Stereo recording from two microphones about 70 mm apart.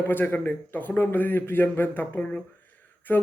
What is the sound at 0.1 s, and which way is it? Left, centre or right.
Speech, left.